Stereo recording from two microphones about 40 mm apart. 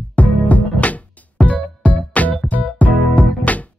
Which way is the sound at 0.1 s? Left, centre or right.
Left.